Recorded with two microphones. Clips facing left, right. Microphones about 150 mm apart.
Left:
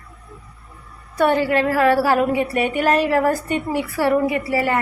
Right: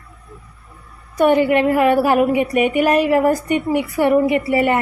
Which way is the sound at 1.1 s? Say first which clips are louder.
Right 3 dB; 15° right (ahead or behind).